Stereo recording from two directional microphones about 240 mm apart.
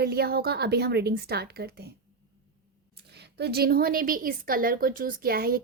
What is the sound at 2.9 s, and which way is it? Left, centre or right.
A woman's voice, right.